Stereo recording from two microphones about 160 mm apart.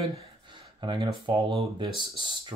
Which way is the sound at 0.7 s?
30° right (ahead or behind).